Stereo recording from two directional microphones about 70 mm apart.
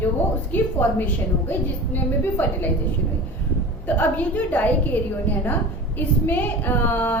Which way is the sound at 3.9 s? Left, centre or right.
Left.